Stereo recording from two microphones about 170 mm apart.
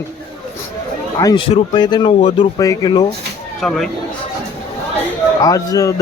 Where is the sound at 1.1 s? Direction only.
25° left (ahead or behind).